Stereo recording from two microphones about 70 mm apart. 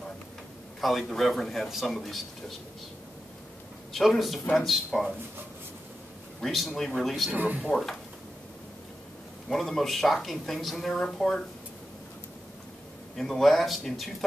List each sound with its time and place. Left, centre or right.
0.7 s a woman's voice: centre
3.9 s a woman's voice: centre
6.4 s a woman's voice: centre
7.3 s speech: centre
7.7 s a woman's voice: centre
9.5 s a woman's voice: centre
13.1 s a woman's voice: centre